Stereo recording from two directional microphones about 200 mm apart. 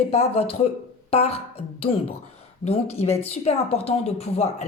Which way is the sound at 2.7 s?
30° left (ahead or behind).